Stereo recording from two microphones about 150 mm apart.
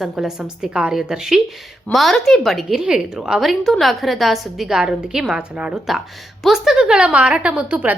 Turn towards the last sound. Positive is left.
turn(degrees=-5)  # may be behind; listen again after turning